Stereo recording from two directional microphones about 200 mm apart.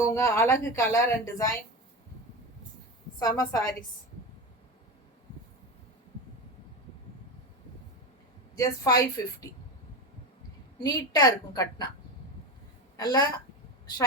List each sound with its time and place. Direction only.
0.0 s speech: 15° left (ahead or behind)
3.2 s a woman's voice: 20° left (ahead or behind)
8.5 s speech: 15° left (ahead or behind)
10.8 s a woman's voice: 20° left (ahead or behind)
13.0 s a woman's voice: 20° left (ahead or behind)